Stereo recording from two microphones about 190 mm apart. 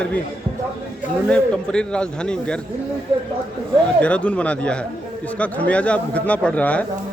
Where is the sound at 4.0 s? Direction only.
5° left (ahead or behind).